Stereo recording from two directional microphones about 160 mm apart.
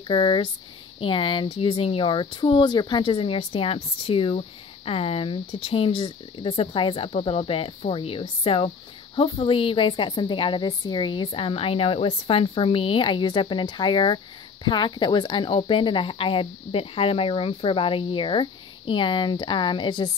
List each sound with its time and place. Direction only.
0.1 s speech: 30° left (ahead or behind)